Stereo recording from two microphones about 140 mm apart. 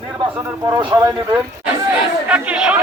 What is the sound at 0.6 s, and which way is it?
Speech, 30° right (ahead or behind).